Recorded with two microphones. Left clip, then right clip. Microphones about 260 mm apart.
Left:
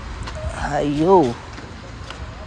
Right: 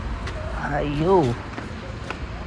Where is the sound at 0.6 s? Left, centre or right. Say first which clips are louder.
Left 5 dB; left.